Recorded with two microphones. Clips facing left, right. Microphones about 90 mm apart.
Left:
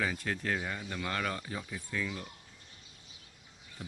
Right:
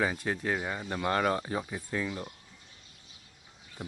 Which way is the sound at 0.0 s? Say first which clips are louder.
Right 4 dB; 25° right (ahead or behind).